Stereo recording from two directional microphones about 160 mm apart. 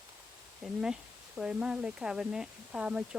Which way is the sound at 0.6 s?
5° right (ahead or behind).